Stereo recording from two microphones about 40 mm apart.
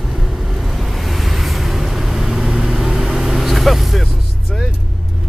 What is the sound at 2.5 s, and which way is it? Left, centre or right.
Vehicle, right.